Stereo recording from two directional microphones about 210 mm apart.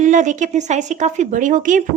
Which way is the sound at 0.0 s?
35° right (ahead or behind).